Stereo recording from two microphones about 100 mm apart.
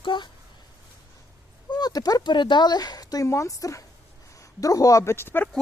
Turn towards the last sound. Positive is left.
turn(degrees=20)  # may be behind; listen again after turning